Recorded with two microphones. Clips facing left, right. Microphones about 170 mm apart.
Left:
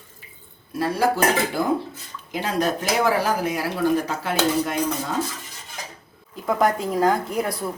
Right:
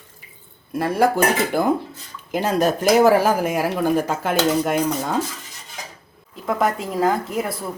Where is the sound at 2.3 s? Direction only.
45° right (ahead or behind).